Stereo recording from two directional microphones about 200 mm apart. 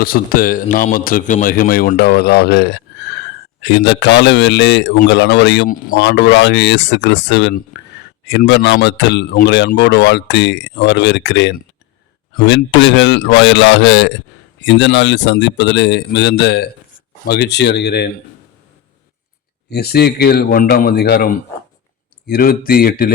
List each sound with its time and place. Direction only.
0.0 s a man's voice: 45° left (ahead or behind)
5.6 s a man's voice: 45° left (ahead or behind)
6.0 s speech: 60° left (ahead or behind)
19.7 s a man's voice: 50° left (ahead or behind)